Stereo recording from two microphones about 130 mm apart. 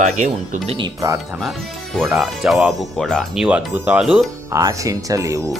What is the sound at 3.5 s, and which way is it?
Speech, 10° right (ahead or behind).